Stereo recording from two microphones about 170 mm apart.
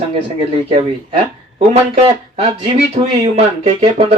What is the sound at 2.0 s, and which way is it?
Speech, 35° right (ahead or behind).